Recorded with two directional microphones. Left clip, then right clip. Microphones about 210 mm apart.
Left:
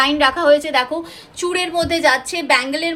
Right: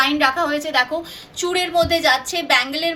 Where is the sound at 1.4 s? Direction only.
35° left (ahead or behind).